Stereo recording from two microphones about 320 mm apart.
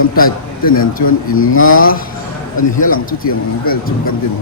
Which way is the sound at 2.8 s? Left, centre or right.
Left.